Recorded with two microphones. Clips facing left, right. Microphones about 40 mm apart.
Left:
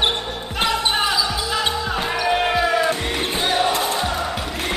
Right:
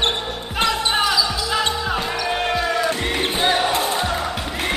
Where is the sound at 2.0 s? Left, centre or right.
Centre.